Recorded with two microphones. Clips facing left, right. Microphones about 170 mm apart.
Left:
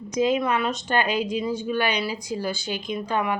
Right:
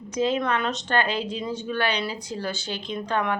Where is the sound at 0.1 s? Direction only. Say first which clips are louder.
Left 2 dB; 10° left (ahead or behind).